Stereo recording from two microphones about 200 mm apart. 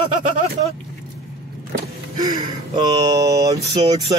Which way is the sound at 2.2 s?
20° right (ahead or behind).